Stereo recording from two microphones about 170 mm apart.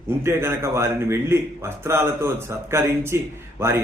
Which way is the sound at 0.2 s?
15° right (ahead or behind).